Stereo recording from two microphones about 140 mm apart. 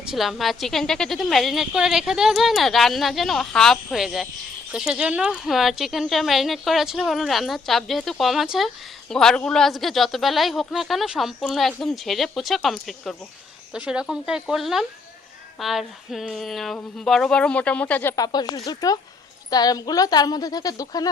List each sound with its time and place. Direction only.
0.0 s speech: centre (ahead or behind)
18.2 s a woman's voice: 30° left (ahead or behind)